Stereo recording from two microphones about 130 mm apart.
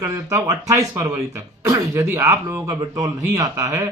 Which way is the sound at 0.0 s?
25° right (ahead or behind).